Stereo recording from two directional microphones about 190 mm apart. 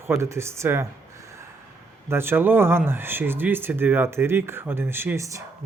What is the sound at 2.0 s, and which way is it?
Speech, 10° right (ahead or behind).